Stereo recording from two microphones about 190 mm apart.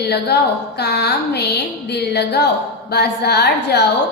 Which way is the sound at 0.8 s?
60° left (ahead or behind).